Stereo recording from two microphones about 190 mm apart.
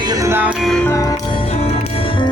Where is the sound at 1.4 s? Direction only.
30° left (ahead or behind).